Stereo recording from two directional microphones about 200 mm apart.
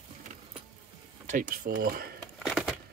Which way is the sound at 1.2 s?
40° right (ahead or behind).